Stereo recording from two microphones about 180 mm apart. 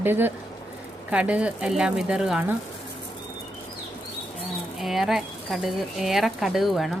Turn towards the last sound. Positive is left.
turn(degrees=0)  # may be behind; listen again after turning